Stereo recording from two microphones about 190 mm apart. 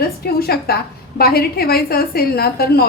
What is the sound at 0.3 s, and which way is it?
A woman's voice, 55° left (ahead or behind).